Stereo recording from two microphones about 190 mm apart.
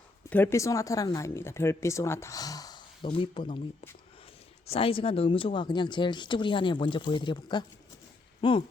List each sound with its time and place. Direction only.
0.3 s speech: 10° left (ahead or behind); by 3.6 s 25° left (ahead or behind)
4.6 s speech: 30° left (ahead or behind)